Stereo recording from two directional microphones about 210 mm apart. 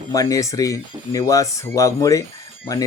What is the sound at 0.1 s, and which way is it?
Speech, 15° left (ahead or behind).